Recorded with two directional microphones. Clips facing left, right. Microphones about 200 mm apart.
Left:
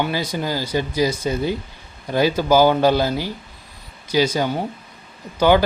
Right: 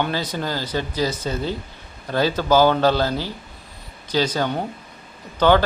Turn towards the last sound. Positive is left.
turn(degrees=10)  # may be behind; listen again after turning